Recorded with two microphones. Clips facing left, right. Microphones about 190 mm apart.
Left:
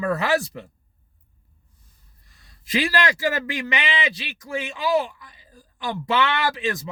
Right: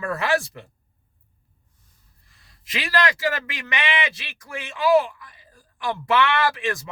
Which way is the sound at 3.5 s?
25° left (ahead or behind).